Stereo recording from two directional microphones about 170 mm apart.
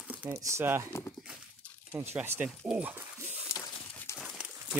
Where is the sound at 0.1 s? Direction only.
15° right (ahead or behind).